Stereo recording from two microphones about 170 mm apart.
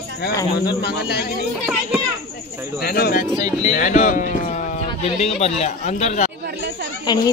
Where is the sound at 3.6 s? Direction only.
50° left (ahead or behind).